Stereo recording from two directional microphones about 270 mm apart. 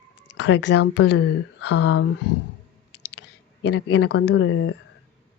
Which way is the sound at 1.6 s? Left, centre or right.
Left.